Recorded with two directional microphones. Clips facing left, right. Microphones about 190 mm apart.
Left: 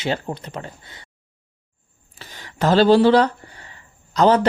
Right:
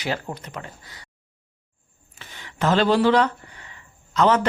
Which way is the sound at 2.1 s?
35° left (ahead or behind).